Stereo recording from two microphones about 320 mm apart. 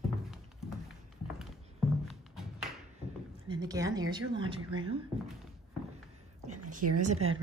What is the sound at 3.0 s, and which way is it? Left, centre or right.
A woman's voice, centre.